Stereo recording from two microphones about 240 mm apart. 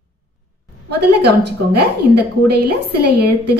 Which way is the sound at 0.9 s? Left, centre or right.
Right.